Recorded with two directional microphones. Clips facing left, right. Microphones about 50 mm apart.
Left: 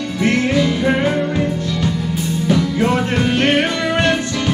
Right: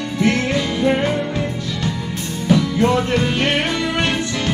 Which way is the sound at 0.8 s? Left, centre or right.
Centre.